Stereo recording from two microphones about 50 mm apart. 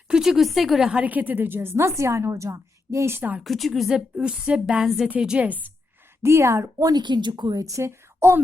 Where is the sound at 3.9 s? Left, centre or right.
Right.